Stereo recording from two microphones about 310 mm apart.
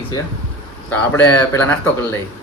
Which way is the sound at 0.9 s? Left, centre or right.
Centre.